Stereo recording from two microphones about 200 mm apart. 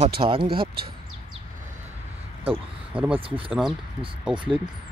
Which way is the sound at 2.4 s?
30° right (ahead or behind).